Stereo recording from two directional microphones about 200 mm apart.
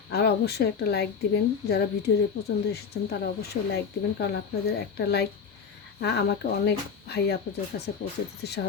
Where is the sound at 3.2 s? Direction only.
55° left (ahead or behind).